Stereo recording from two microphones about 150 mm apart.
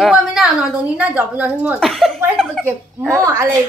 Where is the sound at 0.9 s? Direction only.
10° right (ahead or behind).